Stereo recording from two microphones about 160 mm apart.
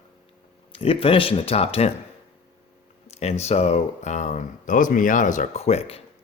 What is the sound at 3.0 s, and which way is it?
Speech, 40° left (ahead or behind).